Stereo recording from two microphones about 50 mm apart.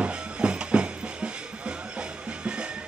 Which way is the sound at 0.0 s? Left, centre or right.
Centre.